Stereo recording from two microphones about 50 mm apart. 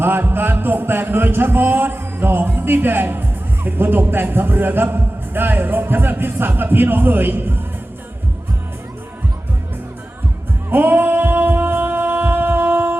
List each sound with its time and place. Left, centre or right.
0.0 s music: right
10.7 s singing: right